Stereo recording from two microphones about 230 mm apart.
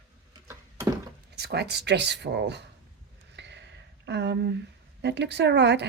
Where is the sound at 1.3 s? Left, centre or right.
Right.